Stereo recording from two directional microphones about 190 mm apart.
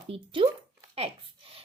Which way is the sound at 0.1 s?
25° right (ahead or behind).